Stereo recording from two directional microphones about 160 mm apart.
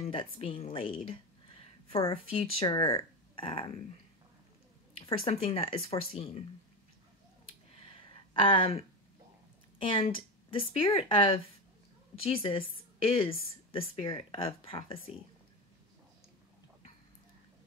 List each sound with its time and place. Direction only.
0.0 s a woman's voice: 35° left (ahead or behind)
1.0 s a sound: 35° left (ahead or behind)
2.0 s a woman's voice: 35° left (ahead or behind)
4.9 s a woman's voice: 35° left (ahead or behind)
8.3 s a woman's voice: 30° left (ahead or behind)